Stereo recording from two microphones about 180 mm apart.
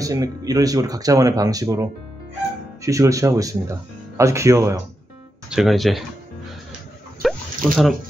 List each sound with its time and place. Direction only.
0.0 s speech: 20° right (ahead or behind)
5.5 s speech: centre (ahead or behind)
7.2 s fowl: centre (ahead or behind)